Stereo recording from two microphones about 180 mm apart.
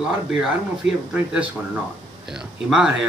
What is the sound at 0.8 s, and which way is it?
Speech, 85° right.